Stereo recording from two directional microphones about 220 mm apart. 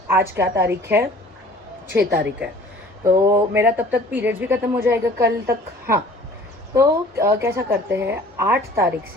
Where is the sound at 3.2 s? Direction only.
15° right (ahead or behind).